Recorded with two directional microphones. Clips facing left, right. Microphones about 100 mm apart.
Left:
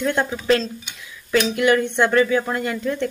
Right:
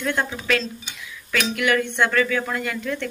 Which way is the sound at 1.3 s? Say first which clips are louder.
Left 4 dB; 30° left (ahead or behind).